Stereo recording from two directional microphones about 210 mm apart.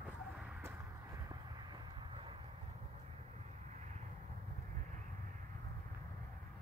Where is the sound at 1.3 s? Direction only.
20° right (ahead or behind).